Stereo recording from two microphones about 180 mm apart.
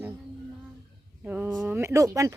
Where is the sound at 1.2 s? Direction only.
10° right (ahead or behind).